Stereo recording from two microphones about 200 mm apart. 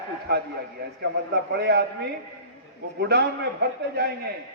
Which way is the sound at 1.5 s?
55° right (ahead or behind).